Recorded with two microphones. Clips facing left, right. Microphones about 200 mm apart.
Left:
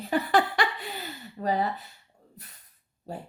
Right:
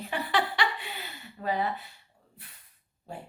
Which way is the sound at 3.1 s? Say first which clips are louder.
Left 4 dB; 40° left (ahead or behind).